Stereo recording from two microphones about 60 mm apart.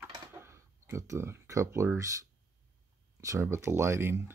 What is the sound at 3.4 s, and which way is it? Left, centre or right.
Speech, right.